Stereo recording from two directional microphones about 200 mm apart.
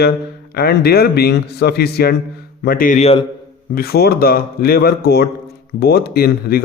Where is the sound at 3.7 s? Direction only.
50° left (ahead or behind).